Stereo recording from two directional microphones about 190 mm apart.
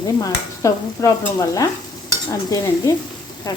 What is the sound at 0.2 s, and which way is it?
Speech, 15° left (ahead or behind).